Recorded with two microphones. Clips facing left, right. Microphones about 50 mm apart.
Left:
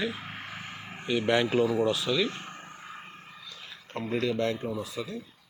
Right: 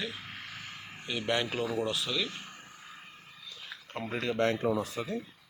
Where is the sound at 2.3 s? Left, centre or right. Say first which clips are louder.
Left 5 dB; left.